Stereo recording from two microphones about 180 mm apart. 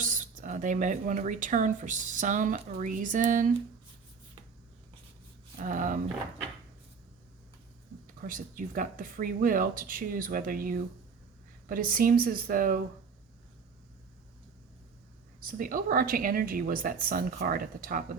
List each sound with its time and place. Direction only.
0.0 s speech: 45° right (ahead or behind)
5.5 s speech: 45° right (ahead or behind)
8.0 s speech: 50° right (ahead or behind)
15.4 s speech: 50° right (ahead or behind)